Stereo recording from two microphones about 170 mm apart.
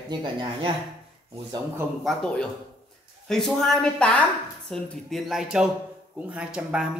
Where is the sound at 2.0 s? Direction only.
5° left (ahead or behind).